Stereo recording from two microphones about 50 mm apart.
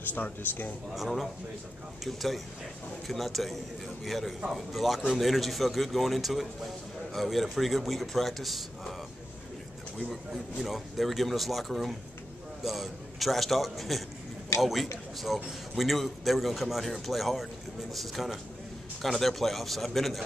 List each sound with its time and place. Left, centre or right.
0.1 s a man's voice: left
0.9 s a man's voice: centre
10.0 s a man's voice: centre